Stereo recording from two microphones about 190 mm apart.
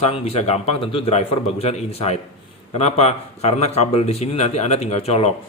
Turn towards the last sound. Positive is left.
turn(degrees=35)  # may be behind; listen again after turning